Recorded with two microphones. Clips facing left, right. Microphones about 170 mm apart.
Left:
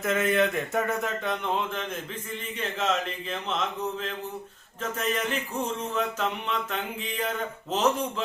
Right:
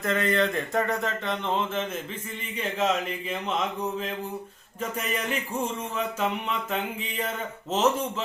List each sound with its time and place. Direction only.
0.0 s speech: 5° left (ahead or behind)
4.8 s speech: 10° right (ahead or behind)